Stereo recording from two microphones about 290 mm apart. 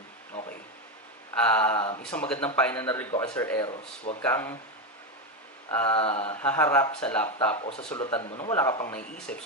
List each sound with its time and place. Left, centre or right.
0.3 s a sound: left
1.5 s a sound: centre
2.0 s speech: centre
3.7 s speech: left
4.2 s speech: centre
5.7 s a sound: centre
6.0 s speech: left
6.3 s speech: centre
7.5 s speech: left
8.5 s speech: centre